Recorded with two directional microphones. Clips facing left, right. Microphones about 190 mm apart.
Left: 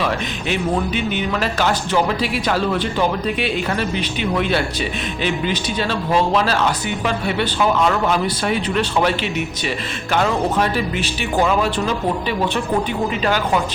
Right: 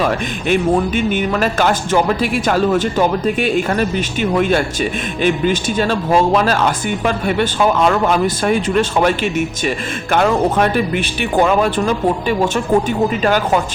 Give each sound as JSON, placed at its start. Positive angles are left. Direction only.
{"t": 0.0, "sound": "speech", "side_deg": -50}